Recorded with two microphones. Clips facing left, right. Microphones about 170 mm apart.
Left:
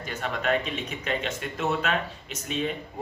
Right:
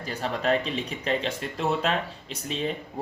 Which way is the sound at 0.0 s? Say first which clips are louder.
Right 2 dB; 30° right (ahead or behind).